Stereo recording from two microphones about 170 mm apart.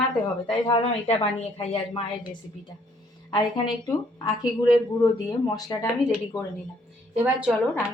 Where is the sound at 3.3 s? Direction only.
25° left (ahead or behind).